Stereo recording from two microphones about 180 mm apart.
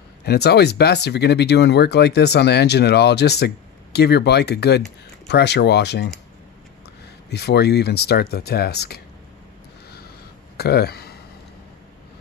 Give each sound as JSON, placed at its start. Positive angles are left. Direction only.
{"t": 0.2, "sound": "speech", "side_deg": 65}
{"t": 7.2, "sound": "speech", "side_deg": 65}
{"t": 10.6, "sound": "speech", "side_deg": 60}